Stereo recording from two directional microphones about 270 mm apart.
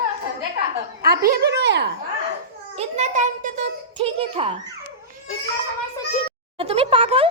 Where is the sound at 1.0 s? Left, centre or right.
Right.